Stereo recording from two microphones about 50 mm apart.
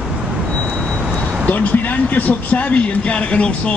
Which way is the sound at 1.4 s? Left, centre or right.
Left.